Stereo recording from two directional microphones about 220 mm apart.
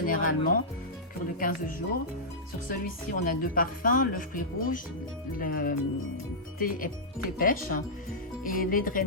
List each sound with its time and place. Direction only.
0.0 s speech: 40° left (ahead or behind)